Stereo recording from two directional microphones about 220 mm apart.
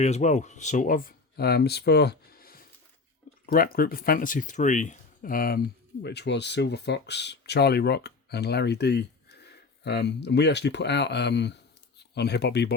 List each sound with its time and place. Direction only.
0.0 s speech: 30° left (ahead or behind); by 12.7 s 50° left (ahead or behind)